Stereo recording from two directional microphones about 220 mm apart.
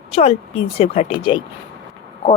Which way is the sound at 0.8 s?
25° left (ahead or behind).